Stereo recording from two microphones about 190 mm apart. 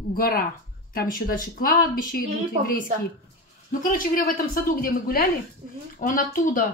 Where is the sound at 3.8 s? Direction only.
45° left (ahead or behind).